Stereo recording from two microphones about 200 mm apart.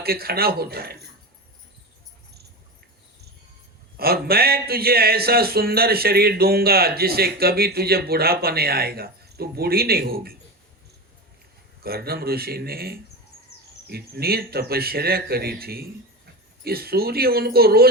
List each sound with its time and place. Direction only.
0.0 s speech: 50° right (ahead or behind)
3.9 s speech: 50° right (ahead or behind)
11.8 s speech: 50° right (ahead or behind)